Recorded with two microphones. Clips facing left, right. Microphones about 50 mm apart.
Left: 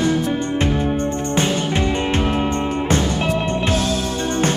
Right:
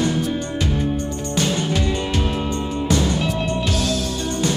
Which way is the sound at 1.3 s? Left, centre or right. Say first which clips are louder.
Even; left.